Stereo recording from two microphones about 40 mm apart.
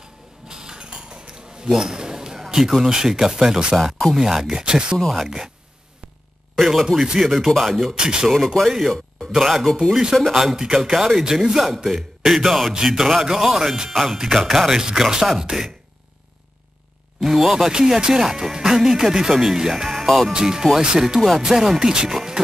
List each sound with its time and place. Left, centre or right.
0.0 s a sound: centre
2.8 s speech: centre
6.5 s a man's voice: centre
7.9 s speech: centre
8.6 s a man's voice: centre
10.3 s a man's voice: centre
17.2 s speech: centre
20.3 s speech: centre